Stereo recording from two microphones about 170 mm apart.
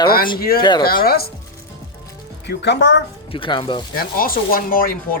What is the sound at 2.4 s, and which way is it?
Speech, 80° left.